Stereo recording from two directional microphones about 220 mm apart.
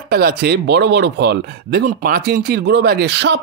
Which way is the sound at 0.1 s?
45° right (ahead or behind).